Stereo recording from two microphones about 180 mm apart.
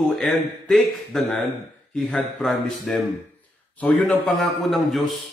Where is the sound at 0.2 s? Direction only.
Centre (ahead or behind).